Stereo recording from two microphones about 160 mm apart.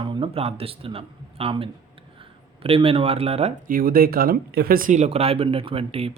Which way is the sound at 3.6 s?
65° right (ahead or behind).